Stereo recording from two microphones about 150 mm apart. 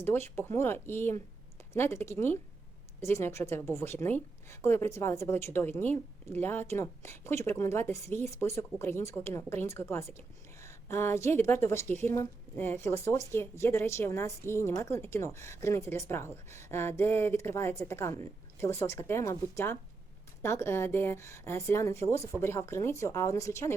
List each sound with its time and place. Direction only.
0.0 s speech: 15° left (ahead or behind)